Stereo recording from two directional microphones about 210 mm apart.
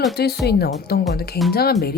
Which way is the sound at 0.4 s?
50° left (ahead or behind).